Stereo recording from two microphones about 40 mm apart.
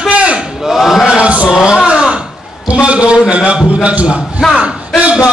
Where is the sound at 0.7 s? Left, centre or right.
Centre.